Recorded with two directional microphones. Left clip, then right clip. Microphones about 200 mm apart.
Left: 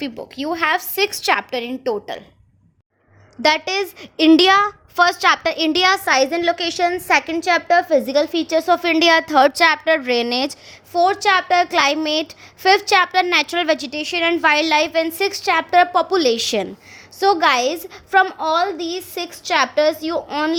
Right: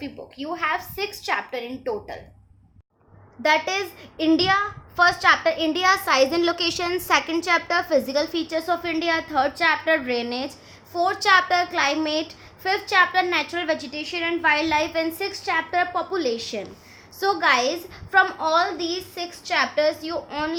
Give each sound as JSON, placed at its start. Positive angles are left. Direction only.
{"t": 0.0, "sound": "a child's voice", "side_deg": 50}
{"t": 3.4, "sound": "a child's voice", "side_deg": 40}
{"t": 6.1, "sound": "a woman's voice", "side_deg": 20}
{"t": 10.9, "sound": "a child's voice", "side_deg": 35}
{"t": 17.2, "sound": "a child's voice", "side_deg": 35}